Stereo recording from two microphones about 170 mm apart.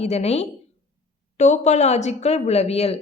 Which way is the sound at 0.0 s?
40° left (ahead or behind).